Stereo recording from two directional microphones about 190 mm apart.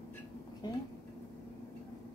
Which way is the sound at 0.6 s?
20° left (ahead or behind).